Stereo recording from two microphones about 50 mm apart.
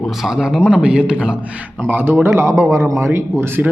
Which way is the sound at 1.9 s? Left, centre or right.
Right.